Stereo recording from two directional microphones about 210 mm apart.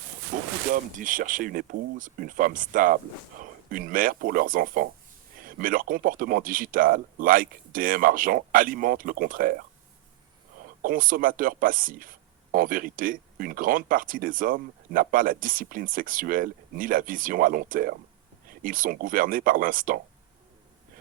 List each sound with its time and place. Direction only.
0.3 s speech: 40° right (ahead or behind)
10.8 s speech: 40° right (ahead or behind)